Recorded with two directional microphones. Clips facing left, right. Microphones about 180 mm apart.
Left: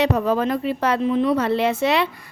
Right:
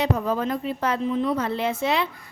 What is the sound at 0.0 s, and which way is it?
A woman's voice, 75° left (ahead or behind).